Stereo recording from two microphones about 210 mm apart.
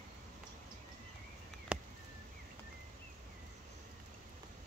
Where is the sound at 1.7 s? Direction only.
5° right (ahead or behind).